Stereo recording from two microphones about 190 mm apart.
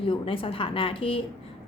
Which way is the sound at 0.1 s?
30° left (ahead or behind).